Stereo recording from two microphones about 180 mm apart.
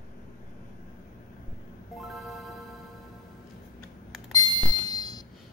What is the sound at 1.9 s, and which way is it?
Music, centre (ahead or behind).